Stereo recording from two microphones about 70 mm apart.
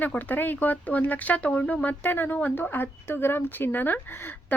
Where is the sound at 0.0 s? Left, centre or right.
Left.